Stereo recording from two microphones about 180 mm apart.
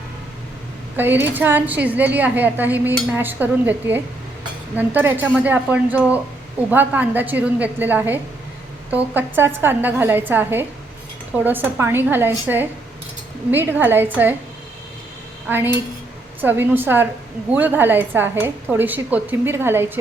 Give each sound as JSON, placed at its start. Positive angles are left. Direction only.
{"t": 0.9, "sound": "a woman's voice", "side_deg": -10}
{"t": 15.4, "sound": "a woman's voice", "side_deg": -10}